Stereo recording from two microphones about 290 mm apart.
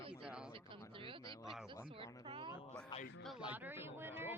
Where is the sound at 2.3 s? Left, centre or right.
Centre.